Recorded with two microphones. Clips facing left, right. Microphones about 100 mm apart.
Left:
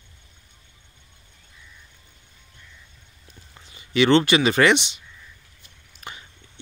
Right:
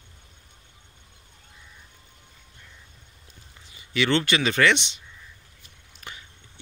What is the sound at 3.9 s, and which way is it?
Speech, 20° left (ahead or behind).